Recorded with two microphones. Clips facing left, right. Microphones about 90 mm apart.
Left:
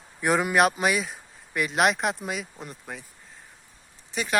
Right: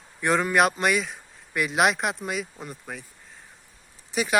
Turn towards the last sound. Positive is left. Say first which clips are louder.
# right 3 dB
turn(degrees=-5)  # may be behind; listen again after turning